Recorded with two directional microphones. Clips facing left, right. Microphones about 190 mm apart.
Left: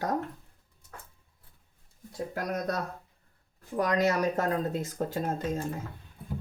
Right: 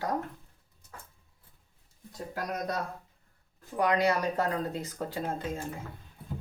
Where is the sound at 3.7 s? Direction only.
40° left (ahead or behind).